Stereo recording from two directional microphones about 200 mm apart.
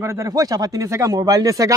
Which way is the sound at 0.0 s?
15° right (ahead or behind).